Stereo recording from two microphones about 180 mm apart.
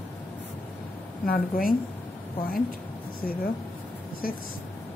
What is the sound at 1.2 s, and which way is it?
Speech, 50° left (ahead or behind).